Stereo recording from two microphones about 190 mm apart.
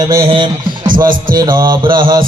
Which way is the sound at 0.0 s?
20° right (ahead or behind).